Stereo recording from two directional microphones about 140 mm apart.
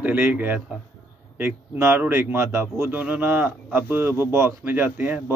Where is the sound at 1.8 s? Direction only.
15° right (ahead or behind).